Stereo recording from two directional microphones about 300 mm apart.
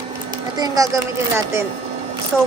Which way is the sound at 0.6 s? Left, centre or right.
Centre.